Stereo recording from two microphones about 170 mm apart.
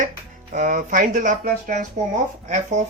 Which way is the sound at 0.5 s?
50° right (ahead or behind).